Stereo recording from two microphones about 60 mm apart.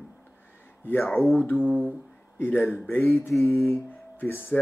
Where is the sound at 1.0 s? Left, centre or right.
Centre.